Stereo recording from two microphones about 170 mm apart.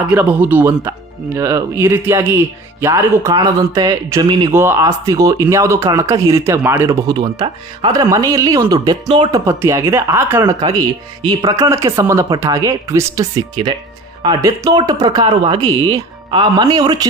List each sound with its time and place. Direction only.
0.1 s a man's voice: 10° right (ahead or behind); by 9.4 s 25° right (ahead or behind)
9.5 s a man's voice: 15° right (ahead or behind)